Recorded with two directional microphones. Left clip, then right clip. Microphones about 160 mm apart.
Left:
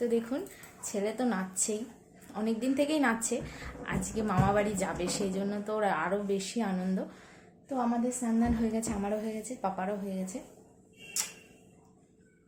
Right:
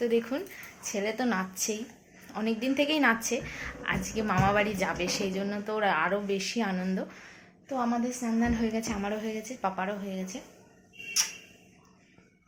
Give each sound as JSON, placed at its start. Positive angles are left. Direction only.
{"t": 0.0, "sound": "a woman's voice", "side_deg": 0}